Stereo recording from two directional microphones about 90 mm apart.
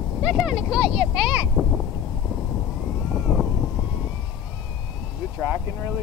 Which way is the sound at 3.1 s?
5° right (ahead or behind).